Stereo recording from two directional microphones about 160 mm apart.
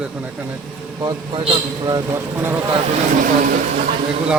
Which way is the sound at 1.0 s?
30° right (ahead or behind).